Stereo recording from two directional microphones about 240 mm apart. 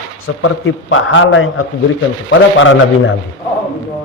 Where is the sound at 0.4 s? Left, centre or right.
Left.